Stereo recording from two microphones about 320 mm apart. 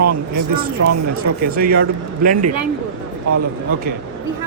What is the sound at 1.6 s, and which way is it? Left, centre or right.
Speech, right.